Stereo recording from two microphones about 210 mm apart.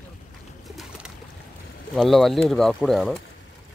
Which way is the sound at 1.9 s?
Centre (ahead or behind).